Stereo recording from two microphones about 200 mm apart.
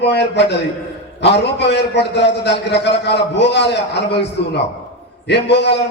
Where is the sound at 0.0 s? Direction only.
60° left (ahead or behind).